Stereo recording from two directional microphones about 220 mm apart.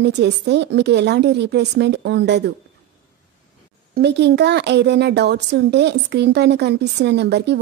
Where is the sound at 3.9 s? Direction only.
50° right (ahead or behind).